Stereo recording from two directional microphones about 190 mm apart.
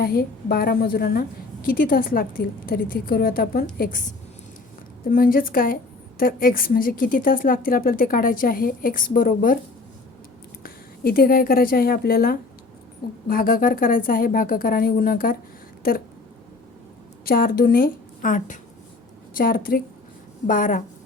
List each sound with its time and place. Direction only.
0.0 s a woman's voice: 55° left (ahead or behind)
5.0 s a woman's voice: 50° left (ahead or behind)
10.6 s a woman's voice: 50° left (ahead or behind)
17.2 s a woman's voice: 50° left (ahead or behind)